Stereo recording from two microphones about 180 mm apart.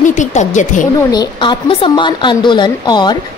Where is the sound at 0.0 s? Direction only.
45° left (ahead or behind).